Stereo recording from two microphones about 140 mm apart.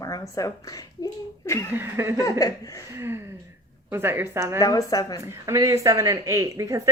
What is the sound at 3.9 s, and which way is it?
Speech, 15° right (ahead or behind).